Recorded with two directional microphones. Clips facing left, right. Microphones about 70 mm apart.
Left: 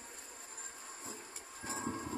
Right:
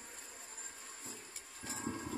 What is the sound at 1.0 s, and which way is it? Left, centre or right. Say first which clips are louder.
Vehicle: left 3 dB; left.